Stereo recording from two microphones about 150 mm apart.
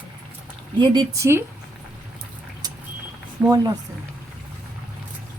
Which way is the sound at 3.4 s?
5° right (ahead or behind).